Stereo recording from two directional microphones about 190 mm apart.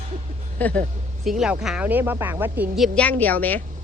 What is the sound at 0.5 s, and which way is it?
Speech, 10° left (ahead or behind).